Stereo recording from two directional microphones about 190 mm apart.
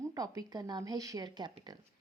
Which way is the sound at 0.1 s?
20° right (ahead or behind).